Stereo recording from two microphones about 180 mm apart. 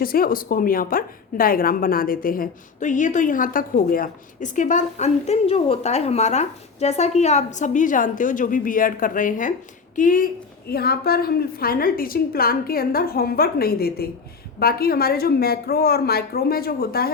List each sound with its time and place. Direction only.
0.0 s a woman's voice: 55° left (ahead or behind)
10.7 s a woman's voice: 60° left (ahead or behind)